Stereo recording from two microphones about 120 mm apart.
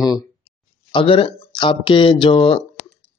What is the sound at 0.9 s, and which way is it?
Speech, 45° left (ahead or behind).